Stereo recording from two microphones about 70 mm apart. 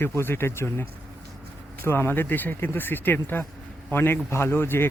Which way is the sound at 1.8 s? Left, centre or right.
Left.